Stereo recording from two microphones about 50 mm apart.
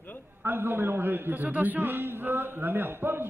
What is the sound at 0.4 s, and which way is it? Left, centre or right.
A man's voice, right.